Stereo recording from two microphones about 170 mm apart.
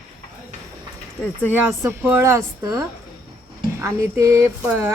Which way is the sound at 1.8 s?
10° right (ahead or behind).